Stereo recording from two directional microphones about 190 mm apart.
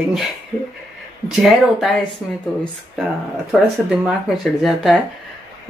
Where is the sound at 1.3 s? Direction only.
Centre (ahead or behind).